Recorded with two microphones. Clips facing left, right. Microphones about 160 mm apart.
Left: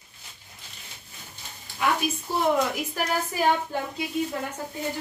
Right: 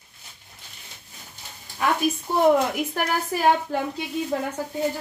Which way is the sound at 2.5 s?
55° right (ahead or behind).